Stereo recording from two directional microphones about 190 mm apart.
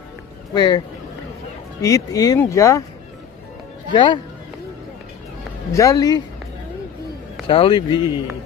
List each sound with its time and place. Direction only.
0.6 s a man's voice: 25° left (ahead or behind)
3.9 s a man's voice: 25° left (ahead or behind)
5.7 s a man's voice: 15° left (ahead or behind)
7.4 s a man's voice: 30° left (ahead or behind)